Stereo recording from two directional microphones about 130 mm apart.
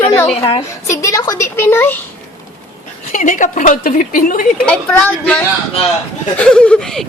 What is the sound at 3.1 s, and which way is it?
A woman's voice, 85° left.